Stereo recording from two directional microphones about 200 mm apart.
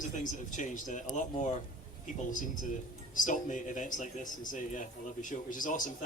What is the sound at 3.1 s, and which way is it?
A man's voice, 40° left (ahead or behind).